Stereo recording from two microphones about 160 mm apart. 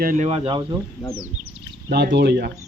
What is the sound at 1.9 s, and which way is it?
Speech, 90° right.